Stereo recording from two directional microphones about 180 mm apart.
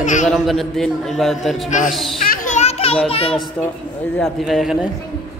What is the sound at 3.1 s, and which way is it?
Speech, 30° left (ahead or behind).